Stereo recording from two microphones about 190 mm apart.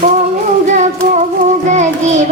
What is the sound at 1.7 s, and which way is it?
Child singing, 40° right (ahead or behind).